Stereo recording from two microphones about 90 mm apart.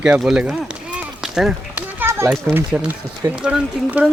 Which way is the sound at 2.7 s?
15° right (ahead or behind).